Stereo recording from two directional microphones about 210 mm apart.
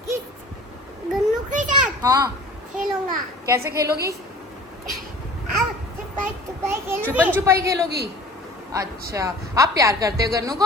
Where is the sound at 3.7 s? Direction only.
50° right (ahead or behind).